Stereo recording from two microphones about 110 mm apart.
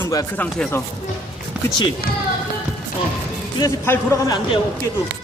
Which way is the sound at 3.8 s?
20° left (ahead or behind).